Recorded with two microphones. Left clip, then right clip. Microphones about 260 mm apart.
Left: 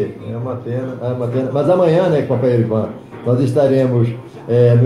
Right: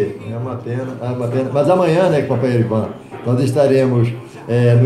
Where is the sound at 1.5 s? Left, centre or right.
Right.